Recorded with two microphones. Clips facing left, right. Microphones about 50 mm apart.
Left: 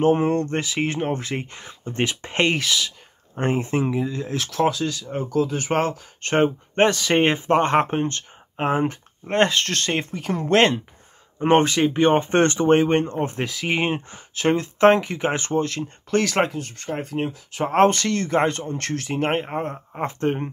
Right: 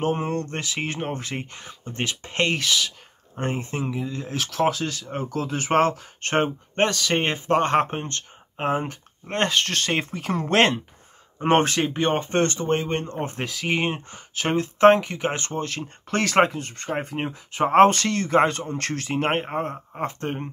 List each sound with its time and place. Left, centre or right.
0.0 s speech: centre
2.0 s speech: left
2.6 s speech: centre
3.3 s speech: centre
4.0 s speech: centre
6.7 s speech: centre
9.5 s speech: centre
11.7 s speech: centre
12.3 s speech: left
13.2 s speech: centre
13.7 s speech: centre
15.6 s speech: centre
19.5 s speech: centre